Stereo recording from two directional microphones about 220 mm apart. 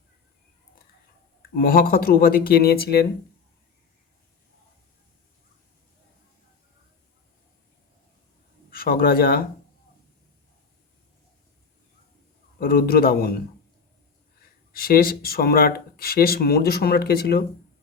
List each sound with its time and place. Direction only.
1.4 s speech: 40° left (ahead or behind)
8.7 s a man's voice: 45° left (ahead or behind)
12.5 s speech: 45° left (ahead or behind)
14.7 s speech: 40° left (ahead or behind)